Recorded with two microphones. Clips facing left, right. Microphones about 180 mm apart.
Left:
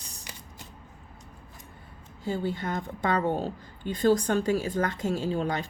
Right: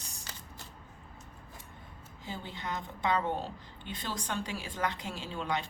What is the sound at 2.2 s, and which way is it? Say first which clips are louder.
A woman's voice: left 10 dB; 45° left (ahead or behind).